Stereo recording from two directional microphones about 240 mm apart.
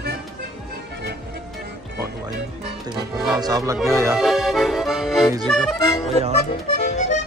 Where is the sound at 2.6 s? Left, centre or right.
Centre.